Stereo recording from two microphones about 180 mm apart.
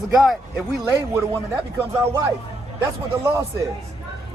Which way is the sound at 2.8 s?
15° right (ahead or behind).